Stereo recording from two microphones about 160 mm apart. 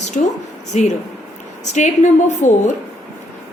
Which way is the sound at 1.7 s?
50° left (ahead or behind).